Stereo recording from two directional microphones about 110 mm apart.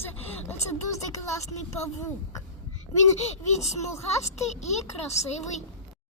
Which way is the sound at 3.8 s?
25° left (ahead or behind).